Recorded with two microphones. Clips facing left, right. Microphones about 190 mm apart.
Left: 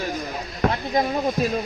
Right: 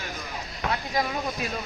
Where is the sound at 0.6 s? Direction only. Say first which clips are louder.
Left 7 dB; 50° left (ahead or behind).